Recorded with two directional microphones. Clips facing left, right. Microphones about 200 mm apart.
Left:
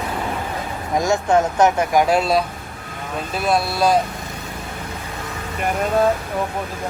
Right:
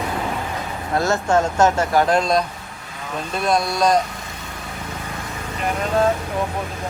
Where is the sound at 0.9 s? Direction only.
15° left (ahead or behind).